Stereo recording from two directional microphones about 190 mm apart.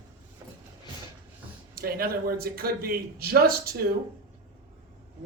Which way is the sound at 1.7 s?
50° right (ahead or behind).